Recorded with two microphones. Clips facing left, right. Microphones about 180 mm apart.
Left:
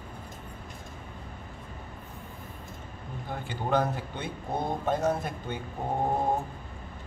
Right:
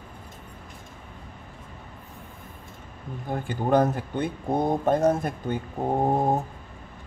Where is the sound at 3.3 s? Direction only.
45° right (ahead or behind).